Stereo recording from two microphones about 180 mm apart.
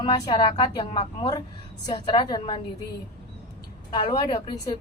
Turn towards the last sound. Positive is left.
turn(degrees=20)  # may be behind; listen again after turning